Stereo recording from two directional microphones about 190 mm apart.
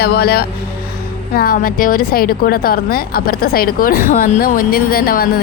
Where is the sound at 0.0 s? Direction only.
55° left (ahead or behind).